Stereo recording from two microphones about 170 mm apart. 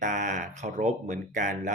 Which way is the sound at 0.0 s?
50° right (ahead or behind).